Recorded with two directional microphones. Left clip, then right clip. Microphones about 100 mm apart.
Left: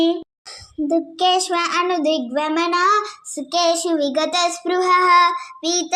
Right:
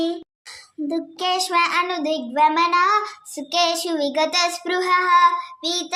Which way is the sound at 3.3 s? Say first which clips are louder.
Left 2 dB; 5° left (ahead or behind).